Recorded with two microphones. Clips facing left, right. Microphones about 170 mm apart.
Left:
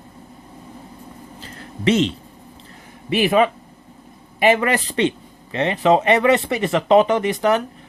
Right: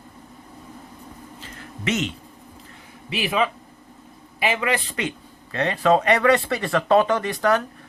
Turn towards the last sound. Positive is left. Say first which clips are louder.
# left 3 dB
turn(degrees=20)  # may be behind; listen again after turning